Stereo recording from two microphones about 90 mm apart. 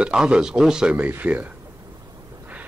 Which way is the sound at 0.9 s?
20° right (ahead or behind).